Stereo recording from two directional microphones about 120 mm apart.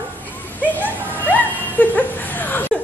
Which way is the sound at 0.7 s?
15° left (ahead or behind).